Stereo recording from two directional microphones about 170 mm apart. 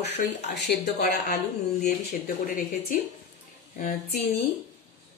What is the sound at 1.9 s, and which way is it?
Speech, 55° left (ahead or behind).